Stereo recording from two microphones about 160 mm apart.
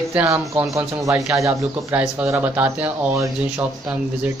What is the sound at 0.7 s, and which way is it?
Speech, 20° right (ahead or behind).